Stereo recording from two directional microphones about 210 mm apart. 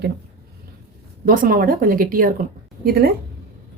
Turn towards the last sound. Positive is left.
turn(degrees=-45)  # may be behind; listen again after turning